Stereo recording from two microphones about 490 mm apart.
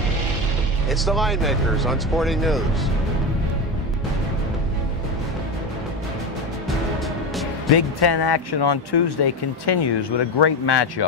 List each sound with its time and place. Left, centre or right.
0.8 s speech: centre
7.7 s speech: left